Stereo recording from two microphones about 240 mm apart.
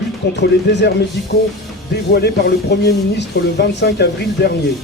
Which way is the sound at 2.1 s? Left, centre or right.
Left.